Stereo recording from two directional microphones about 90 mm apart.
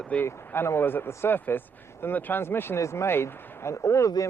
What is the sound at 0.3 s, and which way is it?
Speech, 30° left (ahead or behind).